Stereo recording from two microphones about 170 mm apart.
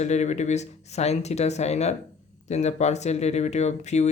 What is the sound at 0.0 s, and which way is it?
Speech, 40° left (ahead or behind).